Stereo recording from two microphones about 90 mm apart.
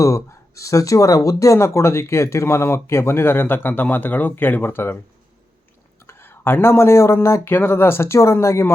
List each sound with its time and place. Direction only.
0.0 s speech: 35° left (ahead or behind)
6.1 s speech: 25° left (ahead or behind)